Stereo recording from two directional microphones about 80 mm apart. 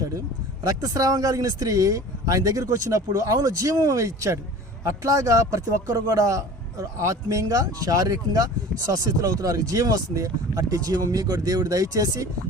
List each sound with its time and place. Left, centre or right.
0.6 s speech: right